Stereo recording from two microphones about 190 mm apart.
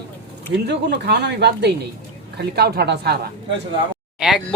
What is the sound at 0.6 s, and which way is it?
Speech, 65° right (ahead or behind).